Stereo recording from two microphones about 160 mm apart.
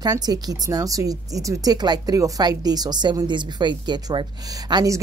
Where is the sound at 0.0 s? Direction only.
25° right (ahead or behind).